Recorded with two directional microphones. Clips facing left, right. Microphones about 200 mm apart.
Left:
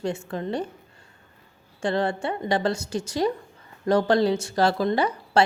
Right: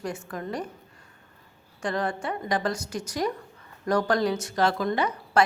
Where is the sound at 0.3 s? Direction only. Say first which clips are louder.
Left 4 dB; 25° left (ahead or behind).